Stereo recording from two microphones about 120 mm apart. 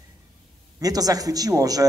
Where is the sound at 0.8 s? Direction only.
30° right (ahead or behind).